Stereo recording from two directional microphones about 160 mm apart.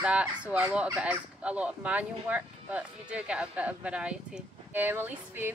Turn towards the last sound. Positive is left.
turn(degrees=-15)  # may be behind; listen again after turning